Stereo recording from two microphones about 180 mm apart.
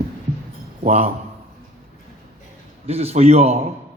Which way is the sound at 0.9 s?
35° right (ahead or behind).